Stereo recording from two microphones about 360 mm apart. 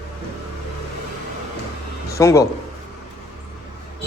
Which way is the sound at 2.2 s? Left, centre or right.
Centre.